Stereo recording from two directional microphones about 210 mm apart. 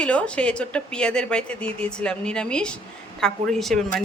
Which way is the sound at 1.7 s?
30° right (ahead or behind).